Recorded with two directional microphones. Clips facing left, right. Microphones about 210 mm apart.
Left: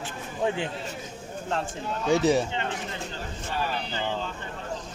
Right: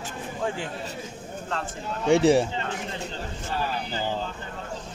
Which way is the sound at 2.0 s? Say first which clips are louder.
Right 3 dB; 30° right (ahead or behind).